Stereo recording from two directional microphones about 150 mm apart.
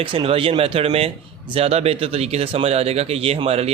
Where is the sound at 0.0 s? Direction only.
35° right (ahead or behind).